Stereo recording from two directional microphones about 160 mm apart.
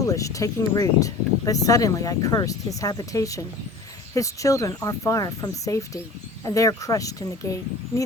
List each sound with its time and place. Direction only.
0.0 s speech: 20° left (ahead or behind)